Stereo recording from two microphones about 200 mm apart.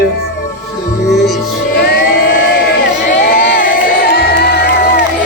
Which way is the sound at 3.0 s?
45° left (ahead or behind).